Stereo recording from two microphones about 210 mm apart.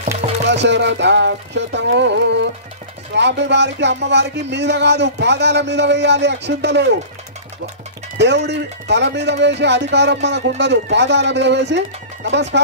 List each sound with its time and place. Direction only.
0.5 s speech: 55° right (ahead or behind)
8.2 s speech: 55° right (ahead or behind)